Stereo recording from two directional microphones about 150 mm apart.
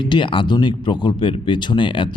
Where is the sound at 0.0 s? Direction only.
35° left (ahead or behind).